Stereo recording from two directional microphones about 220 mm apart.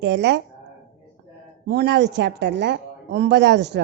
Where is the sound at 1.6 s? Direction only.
50° right (ahead or behind).